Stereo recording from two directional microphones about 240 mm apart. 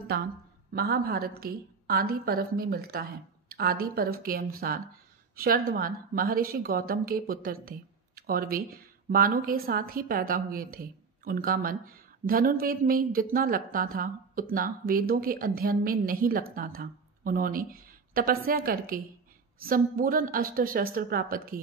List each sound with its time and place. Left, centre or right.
0.7 s a woman's voice: right